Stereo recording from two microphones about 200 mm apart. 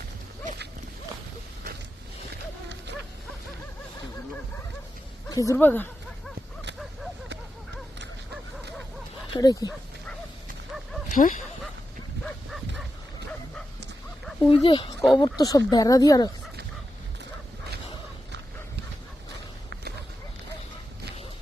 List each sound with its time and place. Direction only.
5.3 s dog: 15° left (ahead or behind)
9.3 s speech: 20° left (ahead or behind)
11.1 s speech: 40° left (ahead or behind)
12.2 s bow-wow: centre (ahead or behind)
14.4 s speech: 25° left (ahead or behind)